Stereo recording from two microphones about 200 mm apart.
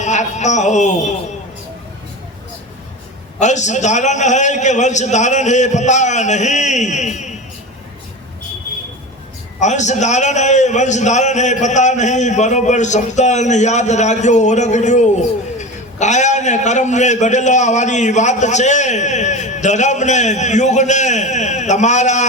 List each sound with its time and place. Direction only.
0.0 s speech: 35° left (ahead or behind)
3.4 s a man's voice: 35° left (ahead or behind)
9.6 s a man's voice: 35° left (ahead or behind)